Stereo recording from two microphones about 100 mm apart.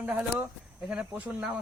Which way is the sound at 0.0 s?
15° right (ahead or behind).